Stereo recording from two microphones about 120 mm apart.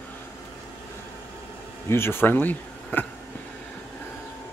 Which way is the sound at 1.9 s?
20° left (ahead or behind).